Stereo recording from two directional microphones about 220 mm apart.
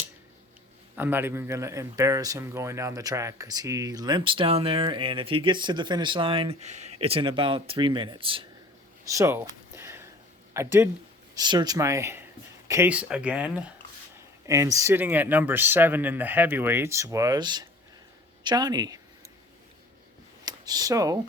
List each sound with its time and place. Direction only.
0.9 s speech: 10° right (ahead or behind)
9.0 s a sound: 15° right (ahead or behind)
10.5 s speech: 10° right (ahead or behind)
20.4 s speech: 15° right (ahead or behind)